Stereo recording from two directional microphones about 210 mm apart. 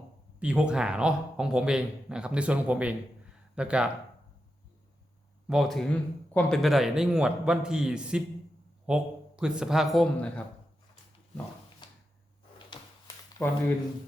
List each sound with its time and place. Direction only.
0.3 s speech: 5° right (ahead or behind)
5.5 s speech: centre (ahead or behind)
12.8 s a sound: 20° left (ahead or behind)
13.4 s speech: 5° left (ahead or behind)